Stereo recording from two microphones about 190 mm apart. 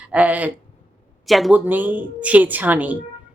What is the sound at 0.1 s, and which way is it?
Speech, 5° right (ahead or behind).